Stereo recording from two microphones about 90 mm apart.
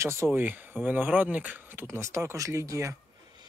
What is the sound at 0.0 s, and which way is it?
Speech, 30° right (ahead or behind).